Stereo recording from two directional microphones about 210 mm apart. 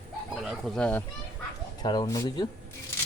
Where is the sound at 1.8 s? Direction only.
20° left (ahead or behind).